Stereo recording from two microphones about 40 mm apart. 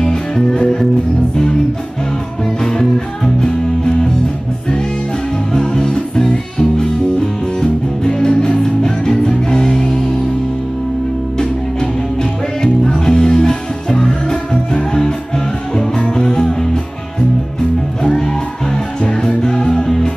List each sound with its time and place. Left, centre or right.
0.0 s music: centre
2.6 s music: centre
5.5 s music: centre
11.3 s music: centre
19.0 s music: centre